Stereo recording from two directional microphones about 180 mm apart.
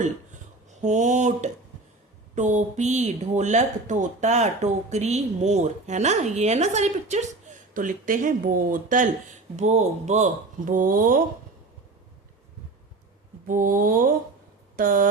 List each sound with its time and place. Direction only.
0.8 s speech: 40° right (ahead or behind)
10.7 s speech: 50° right (ahead or behind)
13.5 s speech: 50° right (ahead or behind)